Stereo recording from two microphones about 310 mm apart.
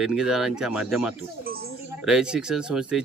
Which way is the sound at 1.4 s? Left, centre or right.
Right.